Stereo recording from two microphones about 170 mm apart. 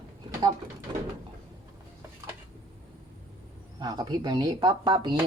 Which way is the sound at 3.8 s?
25° right (ahead or behind).